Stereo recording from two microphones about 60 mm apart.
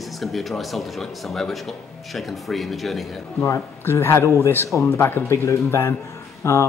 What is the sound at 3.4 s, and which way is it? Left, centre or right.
A man's voice, left.